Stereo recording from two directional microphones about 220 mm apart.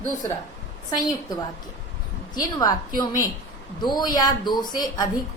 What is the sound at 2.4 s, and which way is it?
Speech, 15° left (ahead or behind).